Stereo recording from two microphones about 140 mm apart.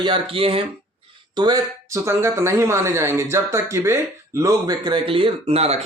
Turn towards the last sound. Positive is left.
turn(degrees=-45)  # may be behind; listen again after turning